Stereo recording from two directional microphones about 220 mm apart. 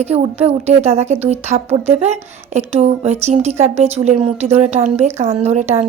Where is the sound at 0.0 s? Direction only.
30° right (ahead or behind).